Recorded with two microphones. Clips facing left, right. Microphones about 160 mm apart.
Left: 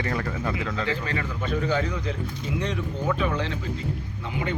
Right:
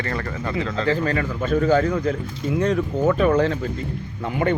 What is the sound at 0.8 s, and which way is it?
Speech, 45° right (ahead or behind).